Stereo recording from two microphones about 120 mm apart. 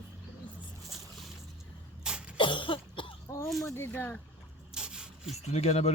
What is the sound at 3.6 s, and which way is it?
Speech, 20° left (ahead or behind).